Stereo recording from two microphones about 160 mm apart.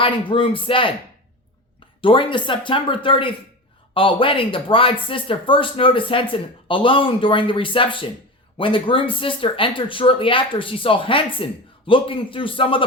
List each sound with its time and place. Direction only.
0.0 s speech: 30° left (ahead or behind)
2.0 s speech: 35° left (ahead or behind)